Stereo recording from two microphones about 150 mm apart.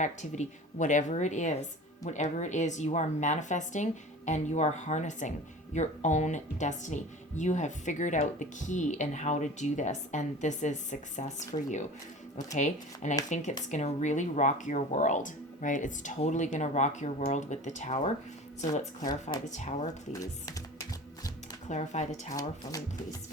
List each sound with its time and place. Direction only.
0.0 s a woman's voice: 50° left (ahead or behind)
21.7 s a woman's voice: 50° left (ahead or behind)